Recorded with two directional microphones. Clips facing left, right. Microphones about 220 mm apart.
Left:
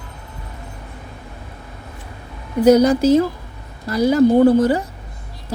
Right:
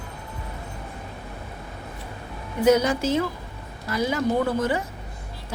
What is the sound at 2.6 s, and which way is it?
Speech, 40° left (ahead or behind).